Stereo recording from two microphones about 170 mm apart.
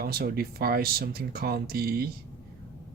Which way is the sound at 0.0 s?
65° right (ahead or behind).